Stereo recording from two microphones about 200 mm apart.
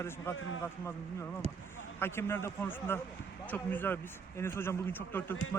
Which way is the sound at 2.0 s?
10° left (ahead or behind).